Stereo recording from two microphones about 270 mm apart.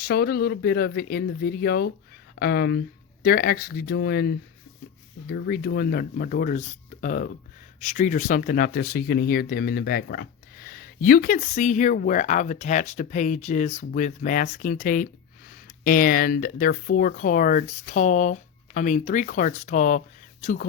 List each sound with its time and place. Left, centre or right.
0.0 s speech: left